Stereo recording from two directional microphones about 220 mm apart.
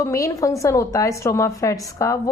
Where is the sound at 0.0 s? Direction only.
15° left (ahead or behind).